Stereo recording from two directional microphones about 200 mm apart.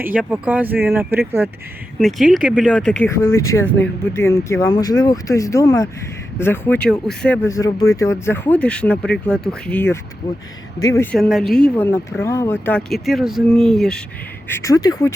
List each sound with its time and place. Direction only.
0.0 s speech: 10° right (ahead or behind)
2.0 s speech: centre (ahead or behind)
3.0 s speech: 15° left (ahead or behind)
14.4 s speech: 15° left (ahead or behind)